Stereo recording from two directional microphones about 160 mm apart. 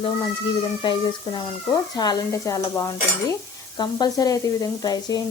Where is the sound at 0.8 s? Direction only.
30° left (ahead or behind).